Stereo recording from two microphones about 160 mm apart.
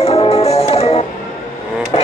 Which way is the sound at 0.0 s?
40° left (ahead or behind).